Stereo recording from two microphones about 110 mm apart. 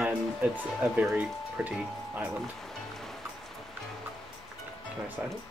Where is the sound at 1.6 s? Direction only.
10° right (ahead or behind).